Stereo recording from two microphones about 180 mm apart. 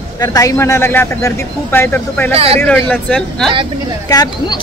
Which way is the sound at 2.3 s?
35° right (ahead or behind).